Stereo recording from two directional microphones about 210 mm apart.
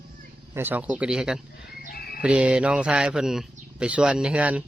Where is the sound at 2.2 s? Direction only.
5° right (ahead or behind).